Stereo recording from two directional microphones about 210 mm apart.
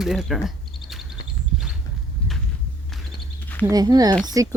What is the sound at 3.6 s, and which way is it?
Speech, 15° right (ahead or behind).